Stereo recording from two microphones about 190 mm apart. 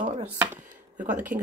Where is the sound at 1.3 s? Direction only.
65° right (ahead or behind).